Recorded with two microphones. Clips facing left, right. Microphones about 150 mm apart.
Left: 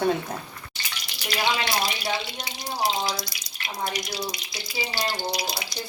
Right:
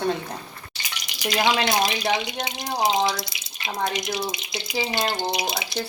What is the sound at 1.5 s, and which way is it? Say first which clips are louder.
Speech: right 4 dB; 20° right (ahead or behind).